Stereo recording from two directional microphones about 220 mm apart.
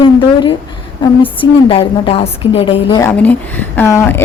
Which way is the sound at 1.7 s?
25° left (ahead or behind).